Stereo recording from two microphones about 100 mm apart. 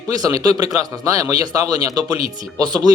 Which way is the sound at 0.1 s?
35° right (ahead or behind).